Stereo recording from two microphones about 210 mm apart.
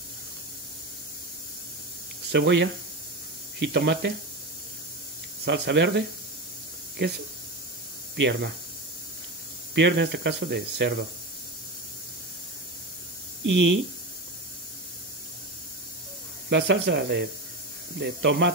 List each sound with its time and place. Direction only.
2.3 s speech: 55° right (ahead or behind)
5.4 s speech: 55° right (ahead or behind)
8.2 s speech: 55° right (ahead or behind)
9.8 s speech: 55° right (ahead or behind)
13.5 s speech: 60° right (ahead or behind)
16.4 s speech: 55° right (ahead or behind)